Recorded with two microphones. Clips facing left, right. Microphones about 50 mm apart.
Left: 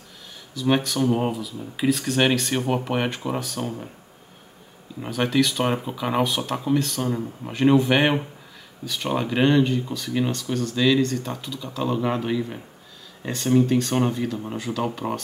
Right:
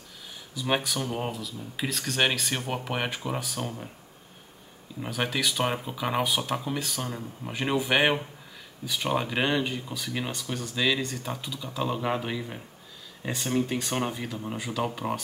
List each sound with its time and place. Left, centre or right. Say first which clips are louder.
0.6 s speech: left 6 dB; centre
1.0 s speech: left 9 dB; centre
5.0 s speech: left 7 dB; centre